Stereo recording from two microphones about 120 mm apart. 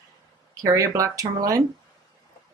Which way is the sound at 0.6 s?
30° right (ahead or behind).